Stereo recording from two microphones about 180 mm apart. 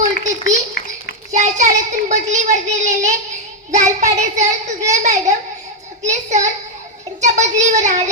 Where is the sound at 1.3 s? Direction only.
40° right (ahead or behind).